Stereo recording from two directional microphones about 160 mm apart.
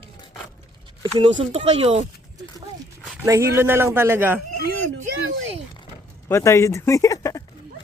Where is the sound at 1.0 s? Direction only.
30° right (ahead or behind).